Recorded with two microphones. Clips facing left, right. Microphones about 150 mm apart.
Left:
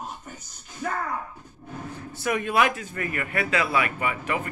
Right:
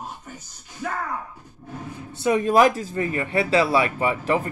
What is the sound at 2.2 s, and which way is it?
Speech, 35° right (ahead or behind).